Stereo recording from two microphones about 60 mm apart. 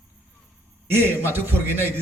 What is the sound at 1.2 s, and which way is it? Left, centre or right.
Speech, right.